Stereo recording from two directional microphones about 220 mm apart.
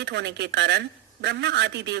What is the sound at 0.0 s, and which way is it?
A man's voice, 50° right (ahead or behind).